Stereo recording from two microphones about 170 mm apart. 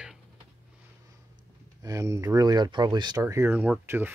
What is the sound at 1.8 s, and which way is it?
Speech, 20° right (ahead or behind).